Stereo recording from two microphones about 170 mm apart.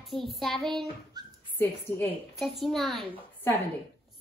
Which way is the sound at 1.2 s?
25° right (ahead or behind).